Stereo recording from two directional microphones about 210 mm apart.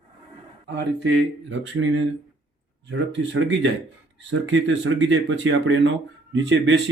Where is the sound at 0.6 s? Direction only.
55° right (ahead or behind).